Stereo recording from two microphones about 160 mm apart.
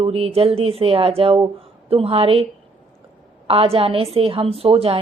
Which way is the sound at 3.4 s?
35° right (ahead or behind).